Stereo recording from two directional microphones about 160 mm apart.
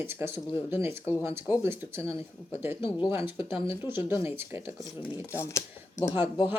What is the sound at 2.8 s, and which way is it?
Speech, 30° left (ahead or behind).